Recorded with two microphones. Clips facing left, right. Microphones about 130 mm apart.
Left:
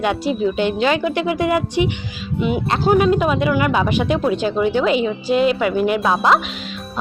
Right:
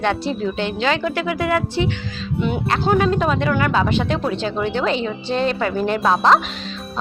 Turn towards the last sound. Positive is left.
turn(degrees=5)  # may be behind; listen again after turning